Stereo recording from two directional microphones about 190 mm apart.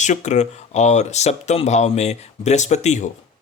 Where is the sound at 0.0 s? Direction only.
40° left (ahead or behind).